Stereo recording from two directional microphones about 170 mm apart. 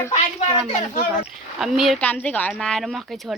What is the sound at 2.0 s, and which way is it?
Speech, 10° left (ahead or behind).